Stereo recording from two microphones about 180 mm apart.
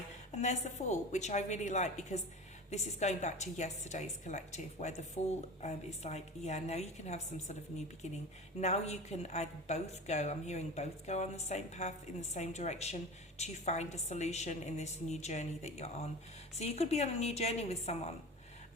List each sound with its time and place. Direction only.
0.3 s a woman's voice: 40° left (ahead or behind)
8.6 s a woman's voice: 35° left (ahead or behind)